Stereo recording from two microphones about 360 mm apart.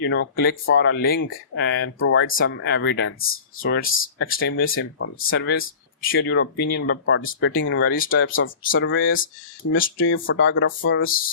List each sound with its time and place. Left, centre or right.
0.0 s speech: left